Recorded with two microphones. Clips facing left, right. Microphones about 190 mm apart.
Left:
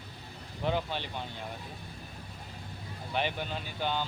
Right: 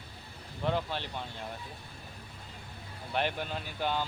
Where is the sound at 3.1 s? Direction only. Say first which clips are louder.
Even; centre (ahead or behind).